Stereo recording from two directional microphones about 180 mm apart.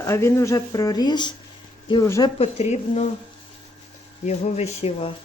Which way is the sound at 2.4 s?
40° left (ahead or behind).